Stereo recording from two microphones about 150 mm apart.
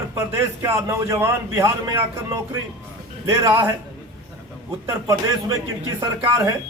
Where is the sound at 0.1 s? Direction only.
15° right (ahead or behind).